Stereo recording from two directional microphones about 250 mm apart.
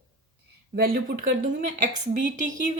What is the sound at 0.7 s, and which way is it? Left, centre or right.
A woman's voice, right.